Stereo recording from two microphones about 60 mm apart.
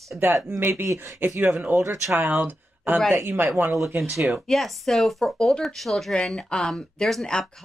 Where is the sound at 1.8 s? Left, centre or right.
Right.